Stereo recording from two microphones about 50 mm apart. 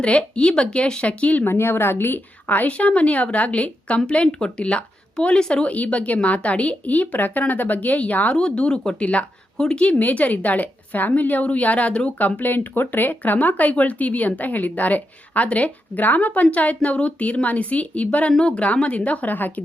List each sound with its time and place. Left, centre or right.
0.0 s a woman's voice: left
1.5 s a woman's voice: left; by 5.6 s centre
5.6 s speech: left
8.4 s a woman's voice: centre
10.0 s speech: left
12.4 s a woman's voice: left